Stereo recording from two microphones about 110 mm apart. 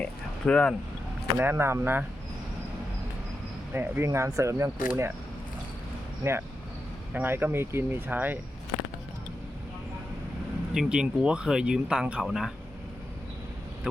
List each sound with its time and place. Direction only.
0.0 s a sound: 10° left (ahead or behind)
1.4 s speech: 20° right (ahead or behind)
3.7 s speech: 20° right (ahead or behind)
6.2 s speech: 25° right (ahead or behind)
10.8 s speech: 10° right (ahead or behind)